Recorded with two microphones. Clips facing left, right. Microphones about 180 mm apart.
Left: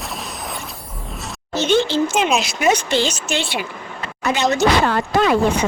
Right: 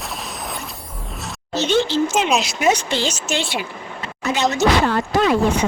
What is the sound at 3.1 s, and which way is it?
Speech, 55° left (ahead or behind).